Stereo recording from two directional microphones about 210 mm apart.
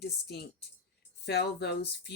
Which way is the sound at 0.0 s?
50° left (ahead or behind).